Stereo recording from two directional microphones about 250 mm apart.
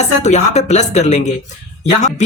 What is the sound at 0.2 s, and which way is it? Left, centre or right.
Speech, left.